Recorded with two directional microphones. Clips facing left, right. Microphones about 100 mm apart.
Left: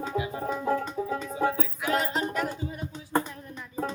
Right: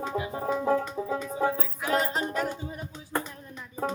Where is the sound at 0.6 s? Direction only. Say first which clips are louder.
Even; 15° right (ahead or behind).